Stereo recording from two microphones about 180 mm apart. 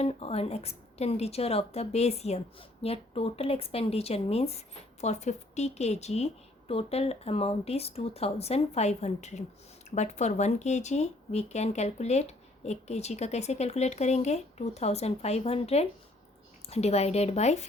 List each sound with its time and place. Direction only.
0.0 s a woman's voice: 35° left (ahead or behind)